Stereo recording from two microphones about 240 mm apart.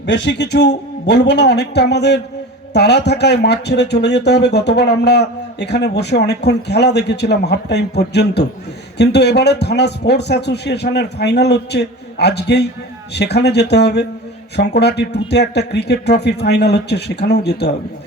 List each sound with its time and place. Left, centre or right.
0.0 s speech: left